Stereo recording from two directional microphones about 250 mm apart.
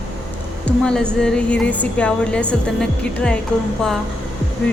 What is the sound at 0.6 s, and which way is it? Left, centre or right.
A woman's voice, centre.